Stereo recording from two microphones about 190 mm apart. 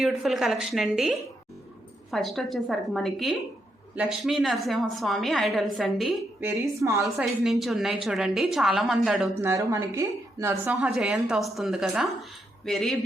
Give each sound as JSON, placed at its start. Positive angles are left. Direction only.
{"t": 0.0, "sound": "a woman's voice", "side_deg": 0}
{"t": 6.7, "sound": "a woman's voice", "side_deg": -15}
{"t": 7.2, "sound": "a woman's voice", "side_deg": 0}
{"t": 9.4, "sound": "a woman's voice", "side_deg": -15}
{"t": 10.8, "sound": "a woman's voice", "side_deg": -5}